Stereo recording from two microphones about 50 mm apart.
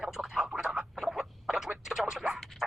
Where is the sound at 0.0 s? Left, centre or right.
Centre.